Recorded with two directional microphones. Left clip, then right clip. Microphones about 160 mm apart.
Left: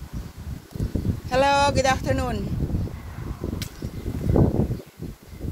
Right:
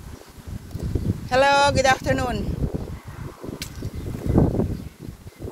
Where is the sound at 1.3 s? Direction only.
10° left (ahead or behind).